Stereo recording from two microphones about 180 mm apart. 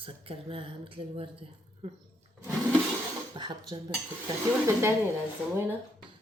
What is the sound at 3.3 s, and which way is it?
A woman's voice, 25° right (ahead or behind).